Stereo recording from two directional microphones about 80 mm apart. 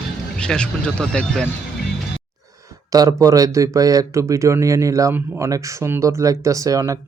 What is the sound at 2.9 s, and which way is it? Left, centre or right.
Speech, right.